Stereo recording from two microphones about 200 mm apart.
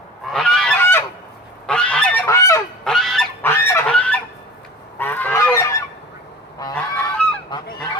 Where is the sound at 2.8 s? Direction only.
Centre (ahead or behind).